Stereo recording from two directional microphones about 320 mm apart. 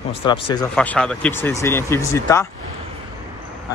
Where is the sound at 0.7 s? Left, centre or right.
Centre.